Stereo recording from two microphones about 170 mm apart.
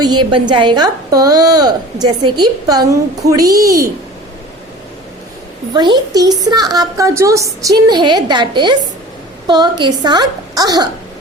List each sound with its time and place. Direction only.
0.0 s a woman's voice: 25° right (ahead or behind)
5.7 s a woman's voice: 25° right (ahead or behind)